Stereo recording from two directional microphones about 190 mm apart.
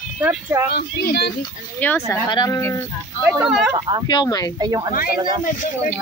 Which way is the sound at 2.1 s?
20° left (ahead or behind).